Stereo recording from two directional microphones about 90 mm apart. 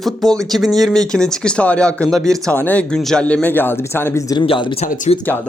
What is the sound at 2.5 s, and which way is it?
Speech, 15° left (ahead or behind).